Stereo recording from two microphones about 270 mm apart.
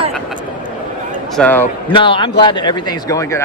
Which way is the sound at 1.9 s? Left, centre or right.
Centre.